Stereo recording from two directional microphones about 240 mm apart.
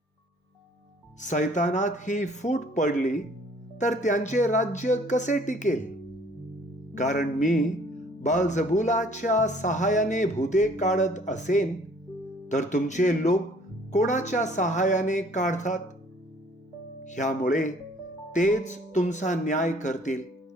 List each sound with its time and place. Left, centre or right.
1.2 s speech: left
6.9 s speech: left
17.0 s speech: left